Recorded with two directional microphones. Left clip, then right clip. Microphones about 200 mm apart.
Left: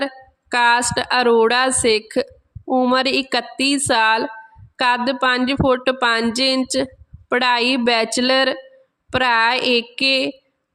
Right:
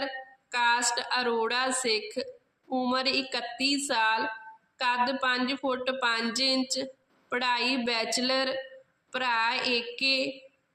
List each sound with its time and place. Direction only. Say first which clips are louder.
0.5 s a woman's voice: left 10 dB; 50° left (ahead or behind)